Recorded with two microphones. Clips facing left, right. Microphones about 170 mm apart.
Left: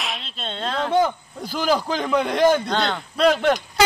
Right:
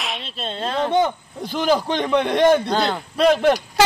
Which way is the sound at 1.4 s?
Centre (ahead or behind).